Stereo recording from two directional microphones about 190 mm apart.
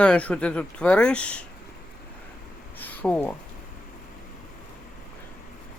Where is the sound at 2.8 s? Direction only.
10° left (ahead or behind).